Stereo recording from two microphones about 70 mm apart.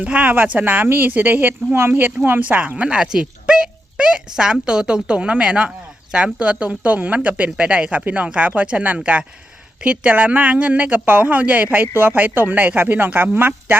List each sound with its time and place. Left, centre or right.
0.0 s speech: centre